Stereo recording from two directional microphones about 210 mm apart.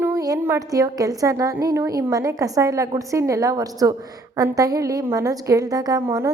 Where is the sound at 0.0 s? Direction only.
15° right (ahead or behind).